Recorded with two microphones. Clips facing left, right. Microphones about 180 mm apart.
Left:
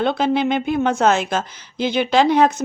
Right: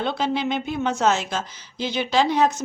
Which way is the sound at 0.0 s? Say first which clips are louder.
Left 6 dB; 55° left (ahead or behind).